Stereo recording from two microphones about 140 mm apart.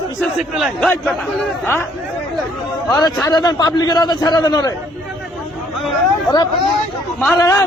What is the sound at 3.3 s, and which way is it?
A man's voice, 30° left (ahead or behind).